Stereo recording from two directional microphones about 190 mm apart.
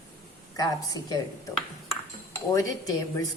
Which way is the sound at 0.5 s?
20° left (ahead or behind).